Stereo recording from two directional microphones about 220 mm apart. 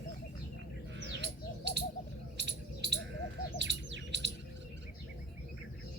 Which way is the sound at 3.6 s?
55° right (ahead or behind).